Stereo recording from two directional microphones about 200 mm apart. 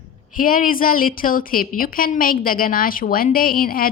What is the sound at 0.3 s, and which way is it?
A woman's voice, 45° left (ahead or behind).